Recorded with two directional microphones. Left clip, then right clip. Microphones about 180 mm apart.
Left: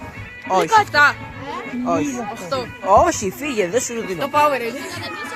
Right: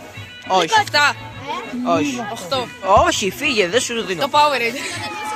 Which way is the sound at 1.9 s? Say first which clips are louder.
Right 3 dB; 5° right (ahead or behind).